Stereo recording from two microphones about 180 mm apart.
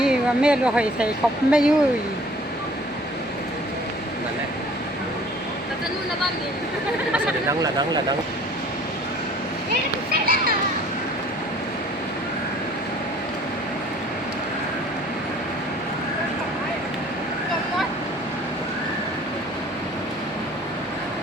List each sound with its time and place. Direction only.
0.0 s a woman's voice: 5° right (ahead or behind)
7.6 s speech: 25° right (ahead or behind)
10.1 s children playing: 55° right (ahead or behind)